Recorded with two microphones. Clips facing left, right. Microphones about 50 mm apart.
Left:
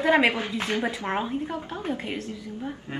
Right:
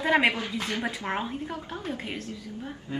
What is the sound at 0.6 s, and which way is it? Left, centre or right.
Speech, left.